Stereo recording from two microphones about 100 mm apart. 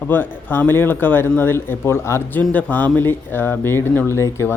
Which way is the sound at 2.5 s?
15° left (ahead or behind).